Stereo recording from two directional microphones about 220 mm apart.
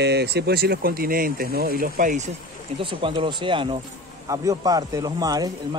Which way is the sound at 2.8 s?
25° right (ahead or behind).